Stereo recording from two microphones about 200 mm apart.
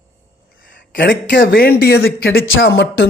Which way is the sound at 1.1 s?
60° left (ahead or behind).